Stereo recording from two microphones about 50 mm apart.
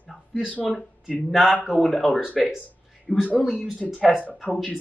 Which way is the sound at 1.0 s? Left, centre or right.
Centre.